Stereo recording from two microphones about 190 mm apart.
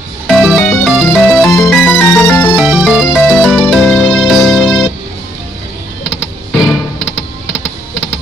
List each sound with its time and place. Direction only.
0.3 s music: centre (ahead or behind)
2.5 s music: 5° right (ahead or behind)